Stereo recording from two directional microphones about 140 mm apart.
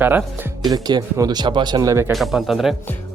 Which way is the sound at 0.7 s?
30° right (ahead or behind).